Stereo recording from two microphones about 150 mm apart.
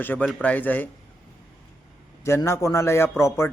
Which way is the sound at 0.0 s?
10° left (ahead or behind).